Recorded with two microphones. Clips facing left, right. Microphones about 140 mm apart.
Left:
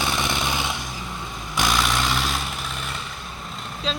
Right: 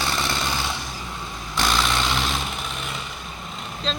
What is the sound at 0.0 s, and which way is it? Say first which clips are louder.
Jackhammer: left 1 dB; 15° left (ahead or behind).